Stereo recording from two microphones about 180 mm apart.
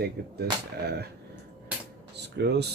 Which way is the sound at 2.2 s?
70° right (ahead or behind).